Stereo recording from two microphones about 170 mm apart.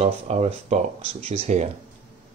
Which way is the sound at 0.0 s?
40° right (ahead or behind).